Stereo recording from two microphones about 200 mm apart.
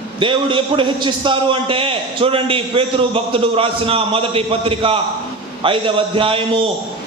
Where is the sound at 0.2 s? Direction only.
25° right (ahead or behind).